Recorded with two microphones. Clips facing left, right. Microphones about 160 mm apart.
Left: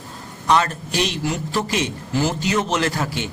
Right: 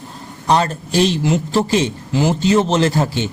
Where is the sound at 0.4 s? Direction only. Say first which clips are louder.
Right 2 dB; 35° right (ahead or behind).